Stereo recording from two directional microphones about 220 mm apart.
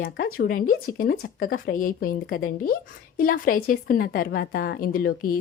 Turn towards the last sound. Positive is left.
turn(degrees=40)  # may be behind; listen again after turning